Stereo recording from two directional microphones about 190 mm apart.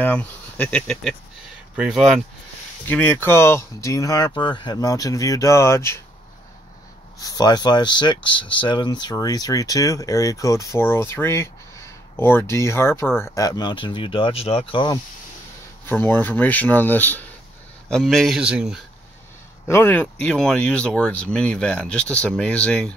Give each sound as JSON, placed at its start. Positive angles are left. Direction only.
{"t": 0.0, "sound": "speech", "side_deg": 10}
{"t": 2.9, "sound": "speech", "side_deg": 10}
{"t": 7.2, "sound": "speech", "side_deg": 20}
{"t": 15.8, "sound": "speech", "side_deg": 10}
{"t": 19.7, "sound": "speech", "side_deg": 10}